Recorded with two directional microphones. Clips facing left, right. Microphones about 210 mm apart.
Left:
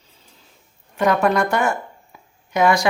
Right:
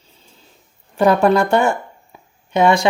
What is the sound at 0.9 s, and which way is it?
Speech, 35° right (ahead or behind).